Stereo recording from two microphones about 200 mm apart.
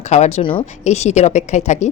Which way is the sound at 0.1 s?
35° left (ahead or behind).